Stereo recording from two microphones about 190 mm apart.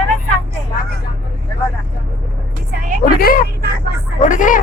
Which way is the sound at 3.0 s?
50° left (ahead or behind).